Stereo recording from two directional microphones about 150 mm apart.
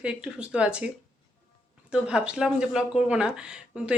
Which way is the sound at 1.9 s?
5° right (ahead or behind).